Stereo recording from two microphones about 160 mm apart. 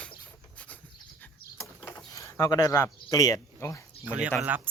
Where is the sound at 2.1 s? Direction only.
20° left (ahead or behind).